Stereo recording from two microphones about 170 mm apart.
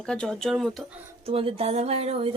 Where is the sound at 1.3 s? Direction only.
35° right (ahead or behind).